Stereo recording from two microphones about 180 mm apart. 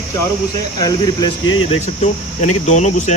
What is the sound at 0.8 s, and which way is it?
Speech, 20° left (ahead or behind).